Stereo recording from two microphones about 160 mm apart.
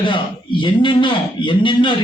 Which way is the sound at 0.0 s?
30° left (ahead or behind).